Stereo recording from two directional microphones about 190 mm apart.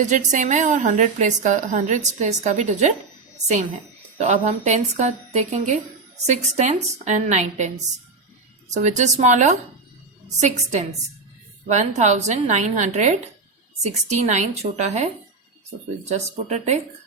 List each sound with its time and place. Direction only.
0.0 s a woman's voice: 40° right (ahead or behind)
4.2 s a woman's voice: 40° right (ahead or behind)
8.7 s a woman's voice: 40° right (ahead or behind)